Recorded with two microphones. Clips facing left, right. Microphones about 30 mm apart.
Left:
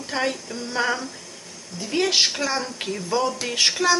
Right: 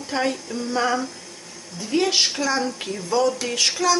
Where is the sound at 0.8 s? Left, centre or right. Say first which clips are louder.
Right 1 dB; centre.